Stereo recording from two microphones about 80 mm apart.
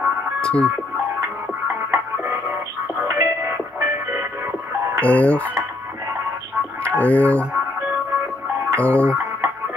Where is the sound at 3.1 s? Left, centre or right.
Right.